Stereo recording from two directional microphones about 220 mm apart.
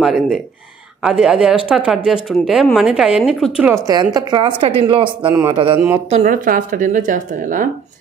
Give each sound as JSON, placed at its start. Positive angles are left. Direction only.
{"t": 0.0, "sound": "a man's voice", "side_deg": 0}
{"t": 6.0, "sound": "speech", "side_deg": -35}